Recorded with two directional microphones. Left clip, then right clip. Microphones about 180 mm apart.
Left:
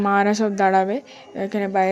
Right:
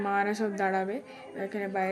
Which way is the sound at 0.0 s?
40° left (ahead or behind).